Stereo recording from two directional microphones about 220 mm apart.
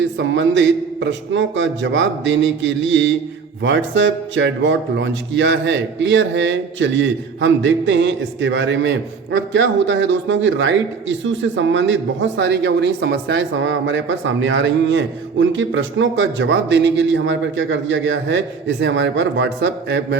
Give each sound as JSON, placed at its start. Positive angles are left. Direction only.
{"t": 0.2, "sound": "speech", "side_deg": -55}